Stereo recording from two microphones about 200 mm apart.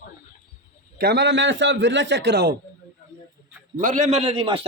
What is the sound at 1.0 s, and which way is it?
A man's voice, 55° right (ahead or behind).